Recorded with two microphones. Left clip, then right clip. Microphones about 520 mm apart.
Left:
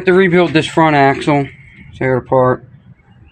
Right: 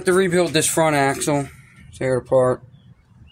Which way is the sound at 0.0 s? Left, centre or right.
Right.